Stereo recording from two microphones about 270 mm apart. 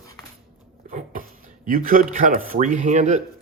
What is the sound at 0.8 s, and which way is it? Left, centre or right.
Speech, right.